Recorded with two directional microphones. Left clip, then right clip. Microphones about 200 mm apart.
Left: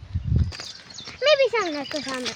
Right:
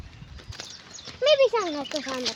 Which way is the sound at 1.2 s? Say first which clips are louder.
Left 1 dB; 30° left (ahead or behind).